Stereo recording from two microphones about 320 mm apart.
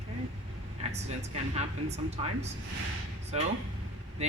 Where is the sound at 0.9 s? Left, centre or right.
Centre.